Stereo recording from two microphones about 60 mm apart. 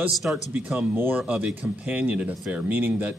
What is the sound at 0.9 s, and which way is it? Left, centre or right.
Speech, right.